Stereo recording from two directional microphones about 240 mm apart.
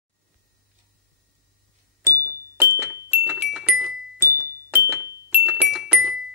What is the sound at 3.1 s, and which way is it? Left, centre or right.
Music, centre.